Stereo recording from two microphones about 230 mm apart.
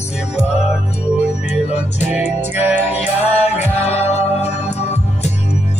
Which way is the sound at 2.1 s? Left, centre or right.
Centre.